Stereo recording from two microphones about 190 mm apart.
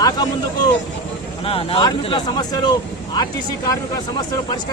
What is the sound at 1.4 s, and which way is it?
Speech, 30° left (ahead or behind).